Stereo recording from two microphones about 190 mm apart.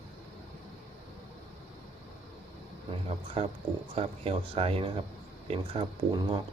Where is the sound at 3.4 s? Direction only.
30° right (ahead or behind).